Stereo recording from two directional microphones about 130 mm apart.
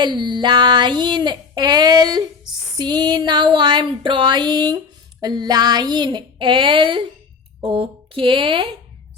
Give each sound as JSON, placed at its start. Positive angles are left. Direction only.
{"t": 0.0, "sound": "child singing", "side_deg": -35}